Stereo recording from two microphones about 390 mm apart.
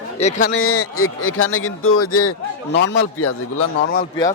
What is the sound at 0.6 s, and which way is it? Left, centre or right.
A man's voice, left.